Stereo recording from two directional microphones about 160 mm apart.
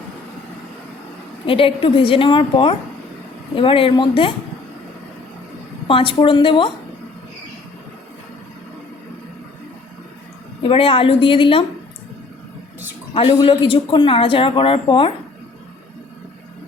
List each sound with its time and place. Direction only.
1.5 s speech: 35° left (ahead or behind)
5.9 s speech: 35° left (ahead or behind)
10.6 s speech: 35° left (ahead or behind)
13.4 s speech: 30° left (ahead or behind)